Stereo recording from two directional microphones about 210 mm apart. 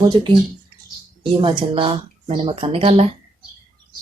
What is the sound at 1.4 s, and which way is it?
Speech, 25° right (ahead or behind).